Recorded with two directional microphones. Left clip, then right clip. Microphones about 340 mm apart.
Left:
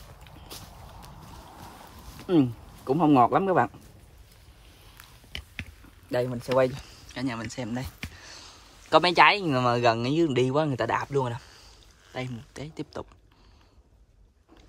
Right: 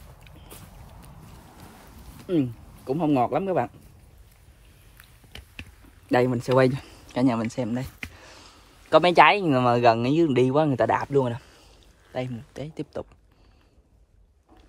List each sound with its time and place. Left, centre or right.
0.2 s vehicle: centre
2.2 s speech: centre
6.2 s speech: right
7.1 s speech: centre